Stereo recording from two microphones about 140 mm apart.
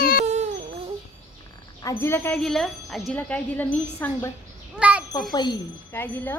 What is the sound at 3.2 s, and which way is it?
Speech, 10° left (ahead or behind).